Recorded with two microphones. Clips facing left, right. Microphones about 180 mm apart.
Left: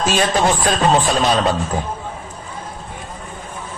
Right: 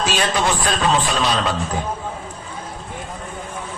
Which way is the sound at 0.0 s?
50° left (ahead or behind).